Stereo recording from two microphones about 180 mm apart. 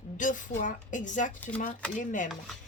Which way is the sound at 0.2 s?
45° left (ahead or behind).